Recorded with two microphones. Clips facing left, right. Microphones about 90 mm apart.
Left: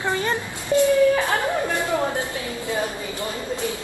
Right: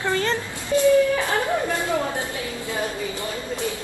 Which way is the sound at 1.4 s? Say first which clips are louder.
Even; 20° left (ahead or behind).